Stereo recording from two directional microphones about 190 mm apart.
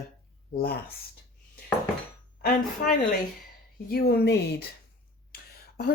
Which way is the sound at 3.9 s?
55° left (ahead or behind).